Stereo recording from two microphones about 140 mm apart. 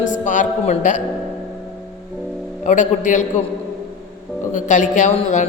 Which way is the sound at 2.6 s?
60° left (ahead or behind).